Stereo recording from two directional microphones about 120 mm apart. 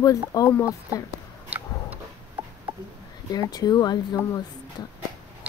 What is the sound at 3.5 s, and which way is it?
Speech, 35° left (ahead or behind).